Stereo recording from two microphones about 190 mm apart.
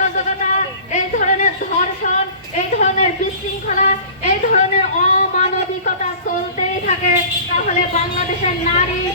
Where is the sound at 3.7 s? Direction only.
40° left (ahead or behind).